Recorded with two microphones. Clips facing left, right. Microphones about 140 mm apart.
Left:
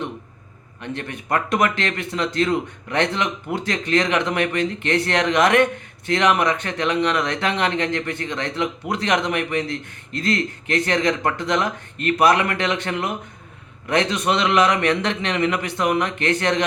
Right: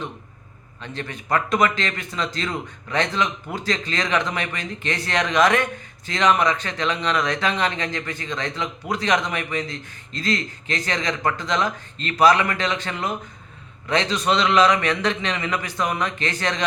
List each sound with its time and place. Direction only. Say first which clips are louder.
0.9 s a man's voice: even; 60° left (ahead or behind)